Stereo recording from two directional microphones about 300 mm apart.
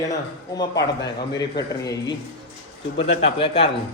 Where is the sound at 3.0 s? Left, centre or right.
Centre.